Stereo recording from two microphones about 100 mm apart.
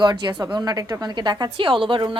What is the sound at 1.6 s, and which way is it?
Speech, 60° right (ahead or behind).